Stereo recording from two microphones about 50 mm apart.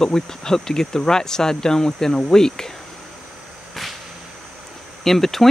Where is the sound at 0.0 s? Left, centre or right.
Centre.